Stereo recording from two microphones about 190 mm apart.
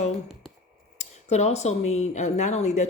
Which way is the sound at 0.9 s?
35° left (ahead or behind).